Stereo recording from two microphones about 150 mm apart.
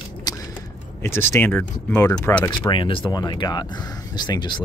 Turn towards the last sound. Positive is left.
turn(degrees=30)  # may be behind; listen again after turning